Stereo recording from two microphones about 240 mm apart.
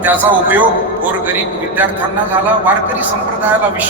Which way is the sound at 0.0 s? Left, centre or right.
Centre.